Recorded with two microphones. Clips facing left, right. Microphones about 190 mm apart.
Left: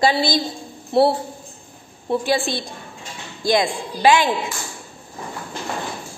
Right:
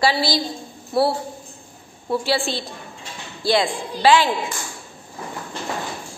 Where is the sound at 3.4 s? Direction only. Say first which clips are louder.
Left 1 dB; 15° left (ahead or behind).